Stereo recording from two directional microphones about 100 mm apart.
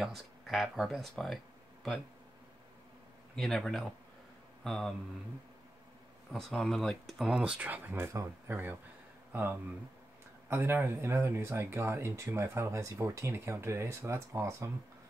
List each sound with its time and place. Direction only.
0.0 s speech: centre (ahead or behind)
3.3 s speech: centre (ahead or behind)
6.3 s speech: 5° left (ahead or behind)
7.2 s speech: 10° right (ahead or behind); by 14.7 s 30° right (ahead or behind)